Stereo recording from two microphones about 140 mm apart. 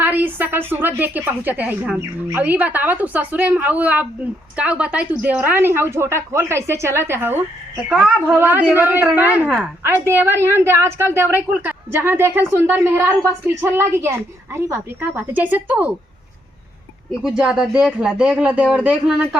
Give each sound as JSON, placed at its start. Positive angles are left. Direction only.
{"t": 0.0, "sound": "a woman's voice", "side_deg": -10}
{"t": 7.9, "sound": "a woman's voice", "side_deg": -5}
{"t": 17.2, "sound": "a woman's voice", "side_deg": -5}